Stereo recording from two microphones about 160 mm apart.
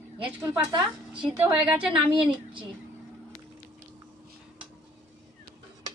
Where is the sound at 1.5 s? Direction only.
10° right (ahead or behind).